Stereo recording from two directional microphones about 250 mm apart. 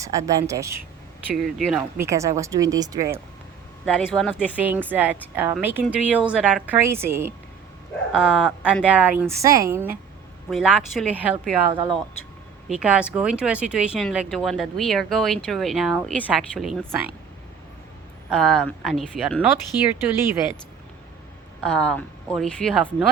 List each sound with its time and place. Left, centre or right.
0.0 s speech: centre
1.4 s speech: centre
2.0 s speech: centre
3.8 s speech: centre
11.7 s speech: centre
12.6 s speech: centre
18.3 s speech: centre
21.7 s speech: centre